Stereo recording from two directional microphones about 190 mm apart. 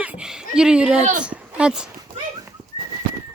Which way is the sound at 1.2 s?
5° right (ahead or behind).